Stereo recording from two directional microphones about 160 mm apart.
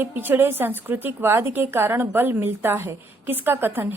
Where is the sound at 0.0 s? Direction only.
15° right (ahead or behind).